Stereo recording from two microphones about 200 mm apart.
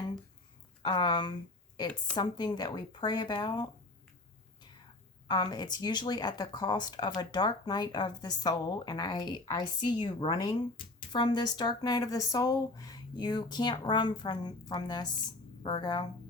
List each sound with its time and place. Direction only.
0.8 s speech: 20° left (ahead or behind)
5.3 s speech: 20° left (ahead or behind)